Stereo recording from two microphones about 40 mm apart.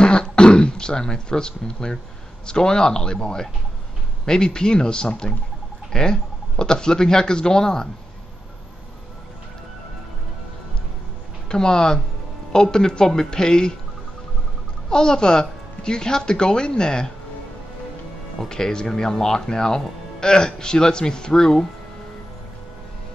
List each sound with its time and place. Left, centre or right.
0.0 s throat clearing: left
2.4 s a woman's voice: centre
11.4 s speech: centre
14.9 s a woman's voice: centre
18.5 s speech: centre